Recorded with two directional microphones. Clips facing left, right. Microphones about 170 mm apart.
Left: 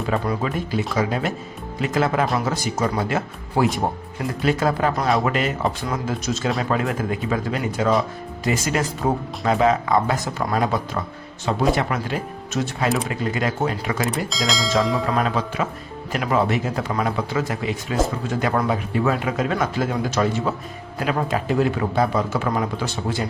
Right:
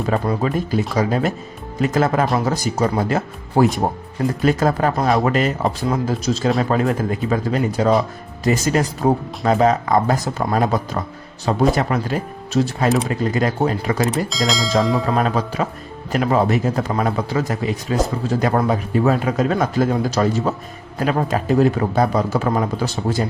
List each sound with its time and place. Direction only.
0.1 s a man's voice: 40° right (ahead or behind)
14.3 s speech: centre (ahead or behind)
15.1 s a man's voice: 40° right (ahead or behind)